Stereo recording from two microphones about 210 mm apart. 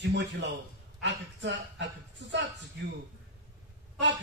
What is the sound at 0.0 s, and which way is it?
A woman's voice, 55° right (ahead or behind).